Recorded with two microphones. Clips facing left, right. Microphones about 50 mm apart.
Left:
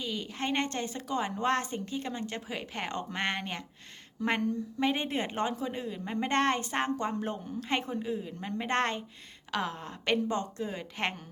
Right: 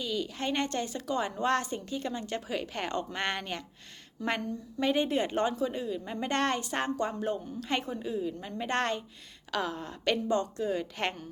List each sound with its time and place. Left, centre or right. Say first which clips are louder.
0.0 s a woman's voice: right 2 dB; left